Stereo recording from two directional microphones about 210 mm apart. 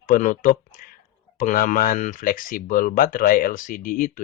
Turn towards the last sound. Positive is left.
turn(degrees=40)  # may be behind; listen again after turning